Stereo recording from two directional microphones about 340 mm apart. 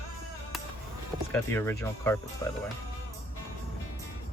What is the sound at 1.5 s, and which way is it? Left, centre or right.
Speech, centre.